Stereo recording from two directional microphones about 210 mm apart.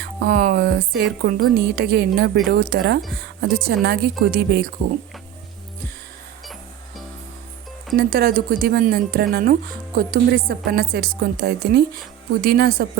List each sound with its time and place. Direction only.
0.0 s speech: 50° right (ahead or behind)
6.4 s music: centre (ahead or behind)
7.9 s speech: 45° right (ahead or behind)